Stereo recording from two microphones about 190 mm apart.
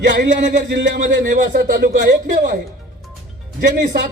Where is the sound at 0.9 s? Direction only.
45° right (ahead or behind).